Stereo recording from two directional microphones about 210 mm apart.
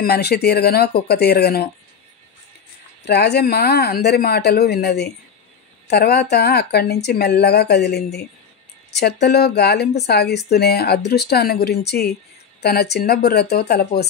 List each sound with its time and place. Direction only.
0.0 s speech: 50° left (ahead or behind)
3.1 s speech: 50° left (ahead or behind)